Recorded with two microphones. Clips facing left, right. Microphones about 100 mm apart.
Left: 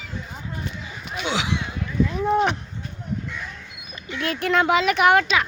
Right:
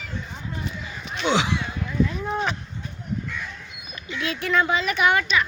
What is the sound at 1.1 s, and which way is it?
Speech, 5° left (ahead or behind).